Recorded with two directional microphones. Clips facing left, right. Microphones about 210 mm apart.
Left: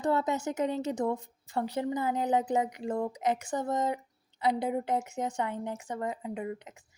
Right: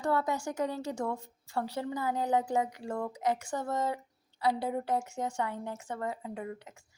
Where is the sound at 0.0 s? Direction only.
20° left (ahead or behind).